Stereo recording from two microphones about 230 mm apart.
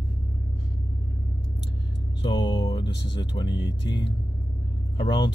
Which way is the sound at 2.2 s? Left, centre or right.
Centre.